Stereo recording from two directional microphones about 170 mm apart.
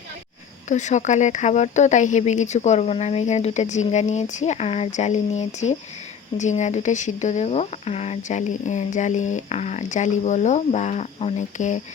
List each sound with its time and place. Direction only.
0.7 s speech: 45° left (ahead or behind)